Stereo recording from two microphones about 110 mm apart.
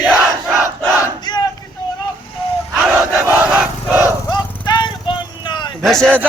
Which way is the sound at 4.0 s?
40° left (ahead or behind).